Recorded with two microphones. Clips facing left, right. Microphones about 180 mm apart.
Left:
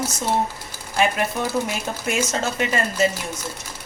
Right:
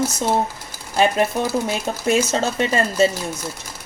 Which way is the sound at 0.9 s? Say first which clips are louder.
Right 4 dB; 35° right (ahead or behind).